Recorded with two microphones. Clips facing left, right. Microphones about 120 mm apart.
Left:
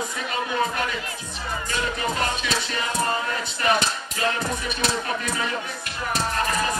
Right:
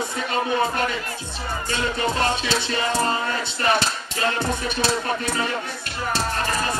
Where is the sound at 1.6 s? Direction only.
30° right (ahead or behind).